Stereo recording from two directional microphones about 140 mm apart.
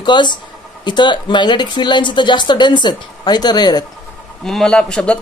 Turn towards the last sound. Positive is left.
turn(degrees=5)  # may be behind; listen again after turning